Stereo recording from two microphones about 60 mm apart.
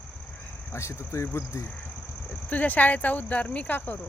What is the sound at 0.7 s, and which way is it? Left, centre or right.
Speech, left.